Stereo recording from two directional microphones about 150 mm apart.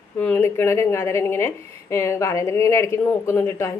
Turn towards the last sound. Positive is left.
turn(degrees=15)  # may be behind; listen again after turning